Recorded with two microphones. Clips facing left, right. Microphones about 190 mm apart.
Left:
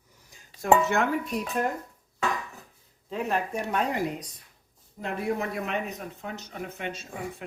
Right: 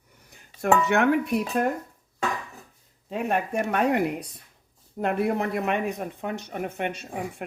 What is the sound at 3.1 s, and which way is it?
Speech, 55° right (ahead or behind).